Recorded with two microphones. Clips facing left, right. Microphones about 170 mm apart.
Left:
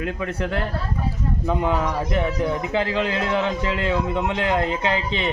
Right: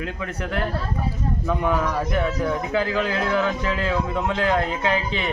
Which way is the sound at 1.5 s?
20° left (ahead or behind).